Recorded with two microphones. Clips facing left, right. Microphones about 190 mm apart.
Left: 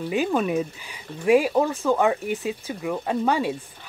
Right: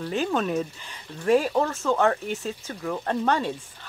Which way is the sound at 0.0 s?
10° left (ahead or behind).